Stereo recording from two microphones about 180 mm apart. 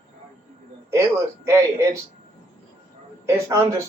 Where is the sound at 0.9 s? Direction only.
15° right (ahead or behind).